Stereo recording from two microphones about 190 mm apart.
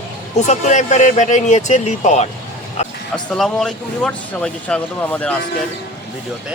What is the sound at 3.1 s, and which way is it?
Speech, 5° left (ahead or behind).